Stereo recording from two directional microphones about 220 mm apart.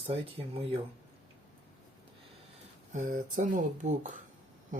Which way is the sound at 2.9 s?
35° right (ahead or behind).